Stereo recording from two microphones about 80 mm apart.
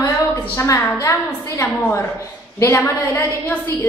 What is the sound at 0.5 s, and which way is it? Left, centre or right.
Speech, left.